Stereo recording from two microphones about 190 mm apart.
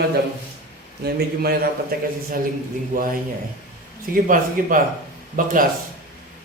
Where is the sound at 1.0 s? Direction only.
55° right (ahead or behind).